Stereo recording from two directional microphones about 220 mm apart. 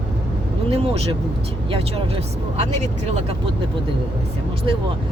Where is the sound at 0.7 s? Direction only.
25° right (ahead or behind).